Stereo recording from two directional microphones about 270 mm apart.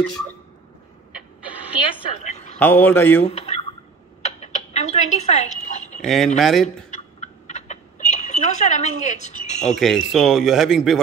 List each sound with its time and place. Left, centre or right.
1.9 s a woman's voice: left
2.6 s speech: centre
3.3 s speech: left
4.2 s a sound: left
6.0 s speech: centre
6.9 s a sound: left
9.8 s speech: centre